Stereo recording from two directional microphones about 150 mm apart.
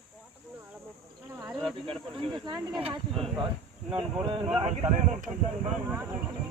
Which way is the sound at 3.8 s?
35° right (ahead or behind).